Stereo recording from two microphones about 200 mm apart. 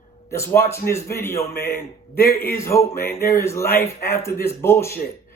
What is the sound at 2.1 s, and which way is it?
Speech, 50° left (ahead or behind).